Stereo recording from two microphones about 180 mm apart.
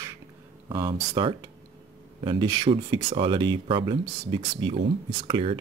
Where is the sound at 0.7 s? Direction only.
25° right (ahead or behind).